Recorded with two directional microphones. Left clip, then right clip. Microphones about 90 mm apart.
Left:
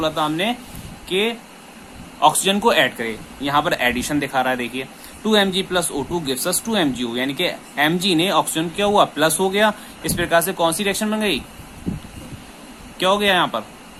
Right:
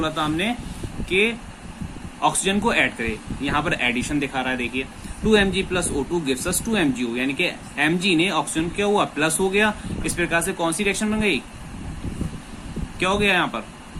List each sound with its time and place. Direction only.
0.0 s speech: 20° left (ahead or behind)
2.2 s speech: 35° left (ahead or behind)
13.0 s speech: 30° left (ahead or behind)